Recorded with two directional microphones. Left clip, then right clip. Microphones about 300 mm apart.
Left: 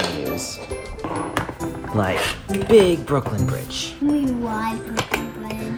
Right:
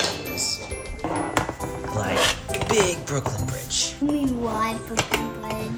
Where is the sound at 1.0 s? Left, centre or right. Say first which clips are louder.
Right 1 dB; centre.